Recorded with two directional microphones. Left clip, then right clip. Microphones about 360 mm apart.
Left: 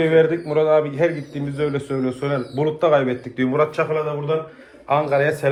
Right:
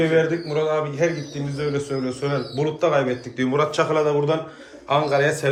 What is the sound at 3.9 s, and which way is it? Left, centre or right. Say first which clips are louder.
Speech: right 3 dB; centre.